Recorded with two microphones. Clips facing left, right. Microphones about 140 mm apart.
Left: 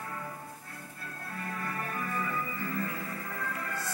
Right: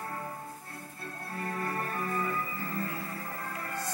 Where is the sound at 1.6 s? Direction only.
30° right (ahead or behind).